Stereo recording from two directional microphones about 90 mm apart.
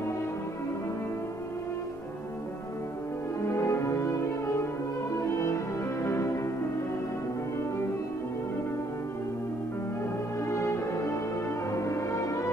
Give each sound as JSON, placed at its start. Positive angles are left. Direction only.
{"t": 3.4, "sound": "music", "side_deg": 30}
{"t": 6.0, "sound": "music", "side_deg": 30}
{"t": 10.5, "sound": "music", "side_deg": 30}